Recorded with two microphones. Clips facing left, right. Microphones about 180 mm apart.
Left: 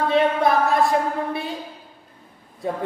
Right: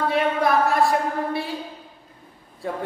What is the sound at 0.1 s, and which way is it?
A woman's voice, 20° left (ahead or behind).